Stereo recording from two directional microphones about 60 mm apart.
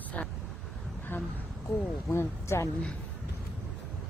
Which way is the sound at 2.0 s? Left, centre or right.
Left.